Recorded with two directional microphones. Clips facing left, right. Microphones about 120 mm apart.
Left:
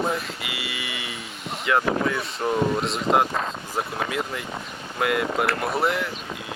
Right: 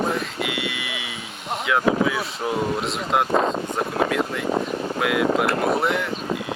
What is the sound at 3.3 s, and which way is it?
Speech, 35° right (ahead or behind).